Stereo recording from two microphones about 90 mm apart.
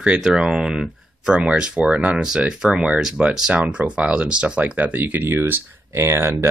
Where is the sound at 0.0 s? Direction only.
10° right (ahead or behind).